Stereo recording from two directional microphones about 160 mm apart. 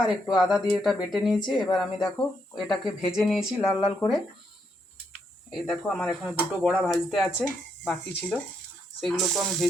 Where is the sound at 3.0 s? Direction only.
Centre (ahead or behind).